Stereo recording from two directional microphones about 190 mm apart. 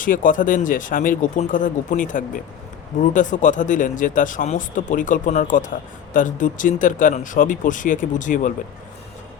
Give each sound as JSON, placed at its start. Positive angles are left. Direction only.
{"t": 0.0, "sound": "speech", "side_deg": 45}